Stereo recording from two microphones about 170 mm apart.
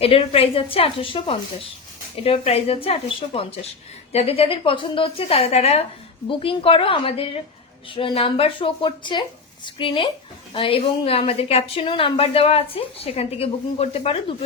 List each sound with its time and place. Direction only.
0.0 s a woman's voice: 35° left (ahead or behind)